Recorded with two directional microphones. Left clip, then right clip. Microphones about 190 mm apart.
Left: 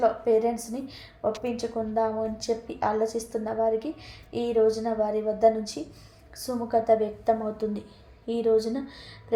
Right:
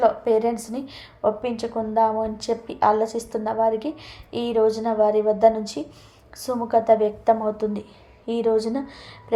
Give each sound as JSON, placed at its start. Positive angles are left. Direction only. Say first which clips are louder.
{"t": 0.0, "sound": "a woman's voice", "louder": "right 4 dB", "side_deg": -20}